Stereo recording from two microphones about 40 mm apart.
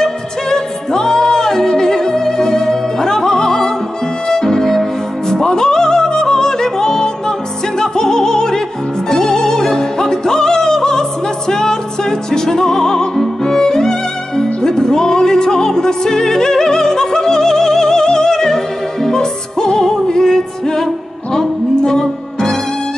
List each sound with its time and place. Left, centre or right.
0.0 s music: centre